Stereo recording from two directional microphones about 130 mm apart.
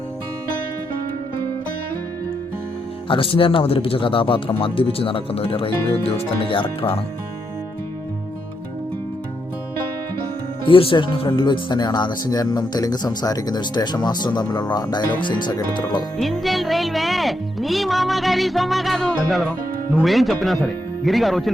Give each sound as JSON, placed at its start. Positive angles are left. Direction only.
{"t": 3.1, "sound": "speech", "side_deg": 45}
{"t": 10.7, "sound": "speech", "side_deg": 40}
{"t": 16.2, "sound": "speech", "side_deg": 0}